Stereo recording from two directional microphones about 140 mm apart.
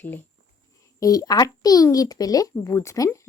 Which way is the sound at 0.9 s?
25° left (ahead or behind).